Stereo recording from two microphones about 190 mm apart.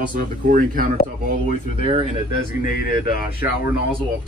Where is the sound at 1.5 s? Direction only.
30° right (ahead or behind).